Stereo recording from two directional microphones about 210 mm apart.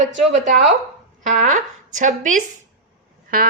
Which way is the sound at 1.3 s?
35° right (ahead or behind).